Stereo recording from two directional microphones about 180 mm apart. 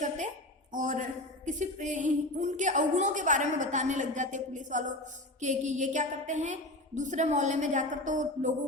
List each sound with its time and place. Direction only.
0.7 s a woman's voice: 45° right (ahead or behind)